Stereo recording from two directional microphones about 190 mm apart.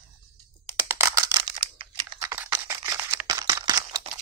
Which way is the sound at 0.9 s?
15° right (ahead or behind).